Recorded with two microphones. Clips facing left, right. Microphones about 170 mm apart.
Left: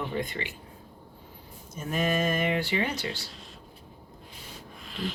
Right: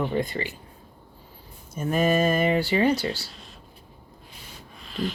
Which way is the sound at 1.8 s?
45° right (ahead or behind).